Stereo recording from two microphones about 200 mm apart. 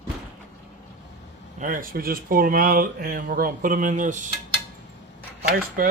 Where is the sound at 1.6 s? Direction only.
45° right (ahead or behind).